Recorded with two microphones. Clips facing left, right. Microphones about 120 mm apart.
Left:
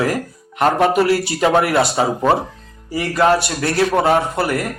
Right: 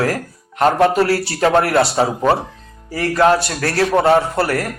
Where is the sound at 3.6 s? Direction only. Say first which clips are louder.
Even; 25° left (ahead or behind).